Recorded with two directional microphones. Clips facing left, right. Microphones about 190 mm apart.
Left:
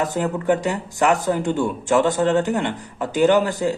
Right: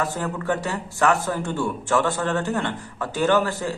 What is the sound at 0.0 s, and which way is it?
Speech, 20° left (ahead or behind).